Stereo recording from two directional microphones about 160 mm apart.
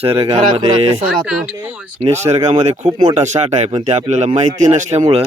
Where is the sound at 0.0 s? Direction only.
35° right (ahead or behind).